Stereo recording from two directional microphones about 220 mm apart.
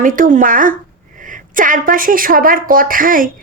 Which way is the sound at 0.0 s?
40° right (ahead or behind).